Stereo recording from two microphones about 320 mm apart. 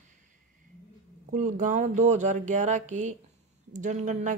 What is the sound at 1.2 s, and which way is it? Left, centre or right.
Speech, right.